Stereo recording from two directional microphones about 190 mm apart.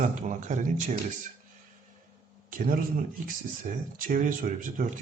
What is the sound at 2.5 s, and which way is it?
Speech, 50° right (ahead or behind).